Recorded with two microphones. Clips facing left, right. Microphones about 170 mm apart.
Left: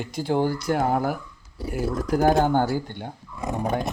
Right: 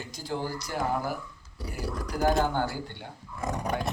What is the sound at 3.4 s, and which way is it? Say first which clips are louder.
Dog: left 4 dB; 20° left (ahead or behind).